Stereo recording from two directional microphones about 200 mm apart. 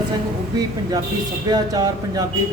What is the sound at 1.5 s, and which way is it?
Speech, 20° right (ahead or behind).